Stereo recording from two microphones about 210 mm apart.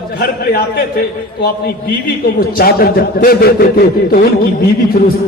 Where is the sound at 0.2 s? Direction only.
45° left (ahead or behind).